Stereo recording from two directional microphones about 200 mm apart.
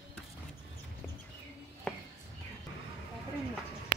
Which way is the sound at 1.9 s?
5° left (ahead or behind).